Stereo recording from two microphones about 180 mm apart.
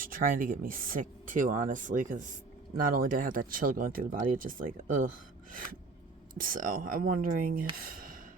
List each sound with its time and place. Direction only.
0.0 s speech: 50° right (ahead or behind)
6.3 s speech: 50° right (ahead or behind)
7.8 s gasp: 50° right (ahead or behind)